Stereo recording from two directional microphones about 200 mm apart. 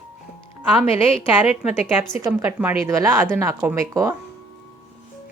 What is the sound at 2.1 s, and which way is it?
A woman's voice, 15° right (ahead or behind).